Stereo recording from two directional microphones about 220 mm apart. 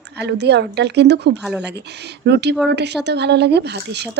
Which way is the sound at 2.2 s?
50° right (ahead or behind).